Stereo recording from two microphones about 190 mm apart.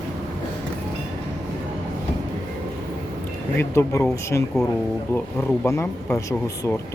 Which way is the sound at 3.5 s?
15° left (ahead or behind).